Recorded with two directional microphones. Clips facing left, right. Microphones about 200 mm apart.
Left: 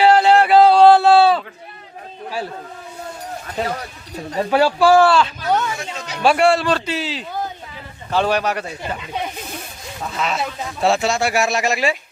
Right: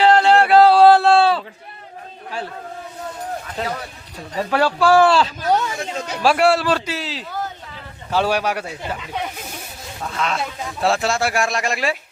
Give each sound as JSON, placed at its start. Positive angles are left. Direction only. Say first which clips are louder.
{"t": 0.0, "sound": "a sound", "louder": "left 1 dB", "side_deg": 5}
{"t": 4.4, "sound": "speech", "louder": "left 3 dB", "side_deg": 5}
{"t": 5.1, "sound": "speech", "louder": "even", "side_deg": -35}
{"t": 6.2, "sound": "speech", "louder": "left 1 dB", "side_deg": -5}
{"t": 10.0, "sound": "speech", "louder": "left 1 dB", "side_deg": 5}